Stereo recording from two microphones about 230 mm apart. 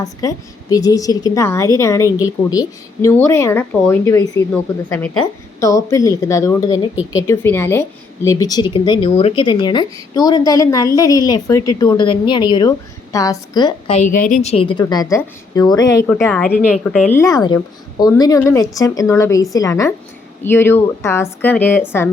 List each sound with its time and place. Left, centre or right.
0.0 s a woman's voice: centre
16.0 s a woman's voice: centre